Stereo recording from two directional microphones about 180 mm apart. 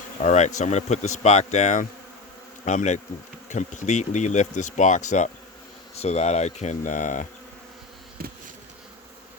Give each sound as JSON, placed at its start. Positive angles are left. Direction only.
{"t": 0.2, "sound": "speech", "side_deg": 40}
{"t": 8.2, "sound": "bee", "side_deg": -55}